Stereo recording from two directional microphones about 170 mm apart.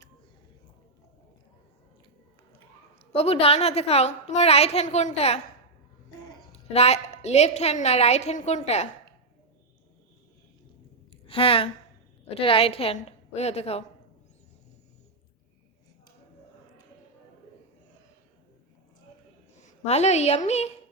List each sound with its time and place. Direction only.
3.1 s a woman's voice: 35° left (ahead or behind)
6.5 s a woman's voice: 40° left (ahead or behind)
11.1 s a sound: 35° left (ahead or behind)
12.2 s a woman's voice: 35° left (ahead or behind)
19.5 s a woman's voice: 45° left (ahead or behind)